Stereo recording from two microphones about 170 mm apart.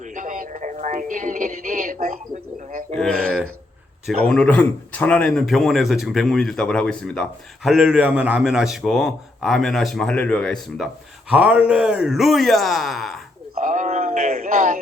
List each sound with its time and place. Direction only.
0.0 s speech: 50° right (ahead or behind)
2.9 s a sound: centre (ahead or behind)
4.3 s speech: 5° left (ahead or behind)
11.3 s speech: 5° right (ahead or behind)
13.6 s speech: 50° right (ahead or behind)